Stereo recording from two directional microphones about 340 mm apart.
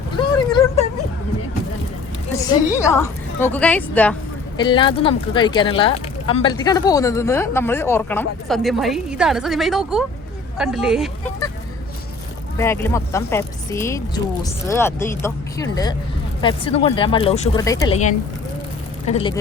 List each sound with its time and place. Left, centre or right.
0.5 s a sound: centre
2.7 s a woman's voice: centre
12.5 s speech: centre